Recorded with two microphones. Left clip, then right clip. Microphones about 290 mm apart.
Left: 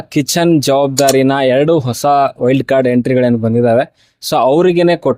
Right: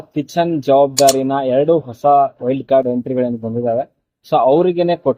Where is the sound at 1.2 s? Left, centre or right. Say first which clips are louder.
Left 4 dB; left.